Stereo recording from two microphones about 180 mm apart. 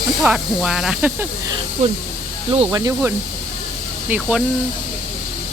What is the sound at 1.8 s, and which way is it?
Speech, 40° right (ahead or behind).